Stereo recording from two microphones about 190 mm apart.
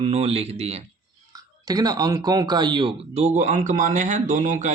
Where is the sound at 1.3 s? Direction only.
20° right (ahead or behind).